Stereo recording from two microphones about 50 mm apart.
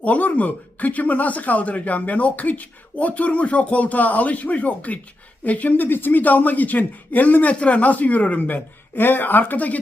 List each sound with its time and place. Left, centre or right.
0.0 s speech: left